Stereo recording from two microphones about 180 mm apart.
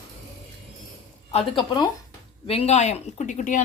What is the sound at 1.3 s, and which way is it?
Speech, 30° left (ahead or behind).